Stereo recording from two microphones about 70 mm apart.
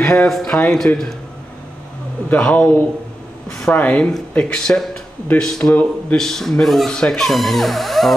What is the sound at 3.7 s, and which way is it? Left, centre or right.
Speech, centre.